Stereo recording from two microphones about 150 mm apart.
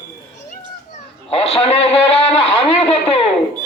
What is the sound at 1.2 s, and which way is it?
A man's voice, 40° left (ahead or behind).